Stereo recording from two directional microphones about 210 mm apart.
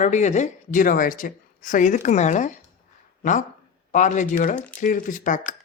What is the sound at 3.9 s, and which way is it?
Speech, 35° left (ahead or behind).